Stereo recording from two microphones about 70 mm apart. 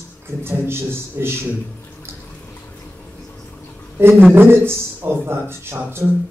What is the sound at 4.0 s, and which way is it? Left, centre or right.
A man's voice, right.